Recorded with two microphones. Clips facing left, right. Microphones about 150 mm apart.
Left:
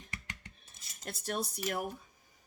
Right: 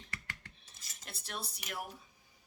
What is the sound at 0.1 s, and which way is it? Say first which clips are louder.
Filing: left 1 dB; 20° left (ahead or behind).